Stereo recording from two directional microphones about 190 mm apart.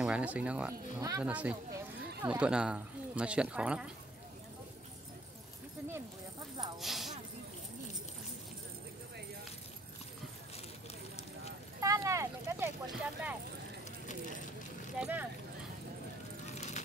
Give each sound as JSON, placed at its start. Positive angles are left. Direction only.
{"t": 0.0, "sound": "speech", "side_deg": -5}
{"t": 6.8, "sound": "speech", "side_deg": 0}
{"t": 11.8, "sound": "speech", "side_deg": -15}
{"t": 15.0, "sound": "speech", "side_deg": -10}
{"t": 16.5, "sound": "a sound", "side_deg": 35}